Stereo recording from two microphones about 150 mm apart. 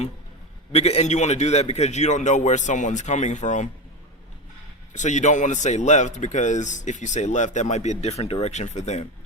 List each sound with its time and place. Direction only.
0.7 s a man's voice: 45° left (ahead or behind)
4.9 s a man's voice: 55° left (ahead or behind)